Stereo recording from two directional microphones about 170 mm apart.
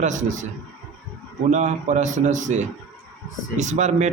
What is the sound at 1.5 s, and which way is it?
A man's voice, 45° right (ahead or behind).